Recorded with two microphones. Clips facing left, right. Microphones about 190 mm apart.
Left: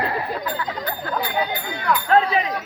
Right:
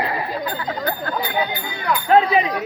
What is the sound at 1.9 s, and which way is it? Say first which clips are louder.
Speech: right 2 dB; 15° right (ahead or behind).